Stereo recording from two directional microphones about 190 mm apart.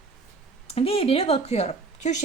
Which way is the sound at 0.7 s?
30° left (ahead or behind).